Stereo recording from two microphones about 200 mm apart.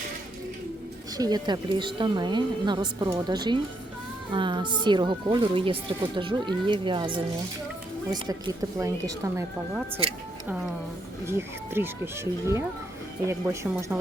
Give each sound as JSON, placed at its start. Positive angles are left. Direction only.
{"t": 1.1, "sound": "a woman's voice", "side_deg": -20}
{"t": 8.3, "sound": "speech", "side_deg": -15}
{"t": 11.3, "sound": "speech", "side_deg": -10}